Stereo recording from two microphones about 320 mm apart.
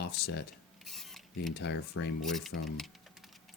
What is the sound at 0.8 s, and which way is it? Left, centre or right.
Mechanisms, centre.